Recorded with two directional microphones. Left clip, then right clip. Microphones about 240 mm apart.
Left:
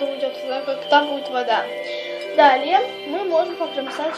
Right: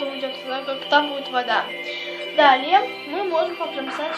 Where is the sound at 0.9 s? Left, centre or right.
Left.